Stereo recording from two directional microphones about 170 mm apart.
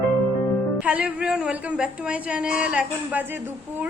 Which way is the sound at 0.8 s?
5° right (ahead or behind).